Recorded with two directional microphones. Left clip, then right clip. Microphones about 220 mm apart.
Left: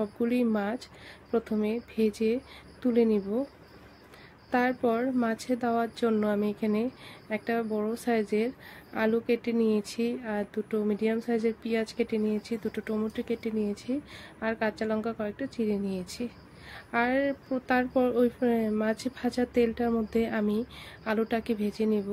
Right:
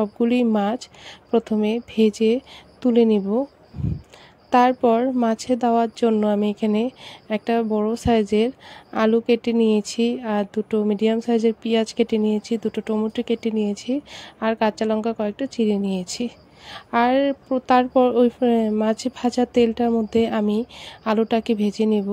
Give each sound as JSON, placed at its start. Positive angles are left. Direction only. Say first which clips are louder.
{"t": 0.0, "sound": "a woman's voice", "louder": "right 8 dB", "side_deg": -25}
{"t": 4.5, "sound": "a woman's voice", "louder": "right 10 dB", "side_deg": -30}